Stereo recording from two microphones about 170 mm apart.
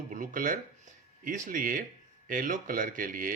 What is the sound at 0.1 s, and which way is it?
Speech, 50° right (ahead or behind).